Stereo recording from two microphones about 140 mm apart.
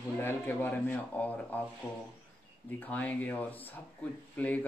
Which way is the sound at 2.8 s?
10° left (ahead or behind).